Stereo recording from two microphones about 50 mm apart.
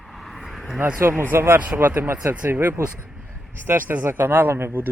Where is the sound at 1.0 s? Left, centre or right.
Right.